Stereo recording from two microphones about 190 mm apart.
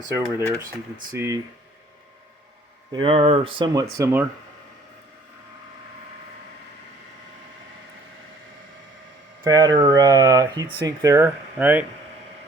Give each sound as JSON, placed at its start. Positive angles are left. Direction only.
{"t": 0.3, "sound": "speech", "side_deg": -15}
{"t": 2.9, "sound": "speech", "side_deg": -30}
{"t": 9.4, "sound": "speech", "side_deg": -20}